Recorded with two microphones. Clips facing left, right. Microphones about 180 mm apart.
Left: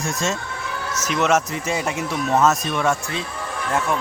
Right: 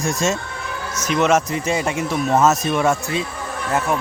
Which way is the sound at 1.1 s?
Centre (ahead or behind).